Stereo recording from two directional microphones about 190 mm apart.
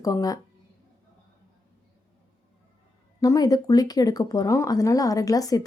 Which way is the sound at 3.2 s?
20° left (ahead or behind).